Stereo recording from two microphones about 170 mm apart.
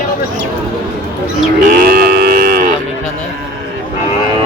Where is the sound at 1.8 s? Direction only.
65° right (ahead or behind).